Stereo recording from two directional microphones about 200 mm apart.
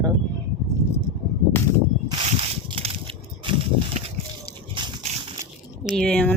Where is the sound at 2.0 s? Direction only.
30° right (ahead or behind).